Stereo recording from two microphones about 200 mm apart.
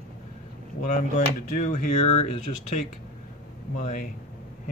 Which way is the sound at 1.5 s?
40° left (ahead or behind).